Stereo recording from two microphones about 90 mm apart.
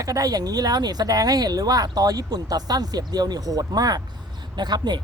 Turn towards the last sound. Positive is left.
turn(degrees=-50)  # may be behind; listen again after turning